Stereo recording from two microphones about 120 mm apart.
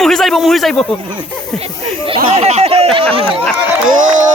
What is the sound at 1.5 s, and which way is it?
Speech, 50° right (ahead or behind).